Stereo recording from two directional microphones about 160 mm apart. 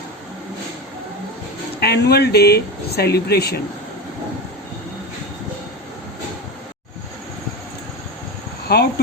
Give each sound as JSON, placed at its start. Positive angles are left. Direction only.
{"t": 1.8, "sound": "speech", "side_deg": 90}
{"t": 8.6, "sound": "speech", "side_deg": 85}